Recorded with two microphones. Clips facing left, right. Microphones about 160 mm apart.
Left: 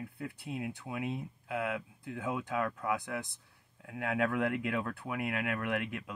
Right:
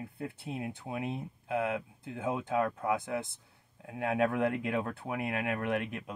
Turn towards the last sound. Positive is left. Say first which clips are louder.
# right 2 dB
turn(degrees=-25)  # may be behind; listen again after turning